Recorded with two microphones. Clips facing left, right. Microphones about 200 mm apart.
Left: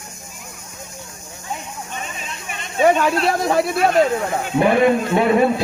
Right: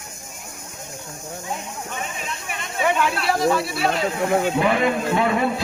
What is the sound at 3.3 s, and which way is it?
Speech, 50° left (ahead or behind).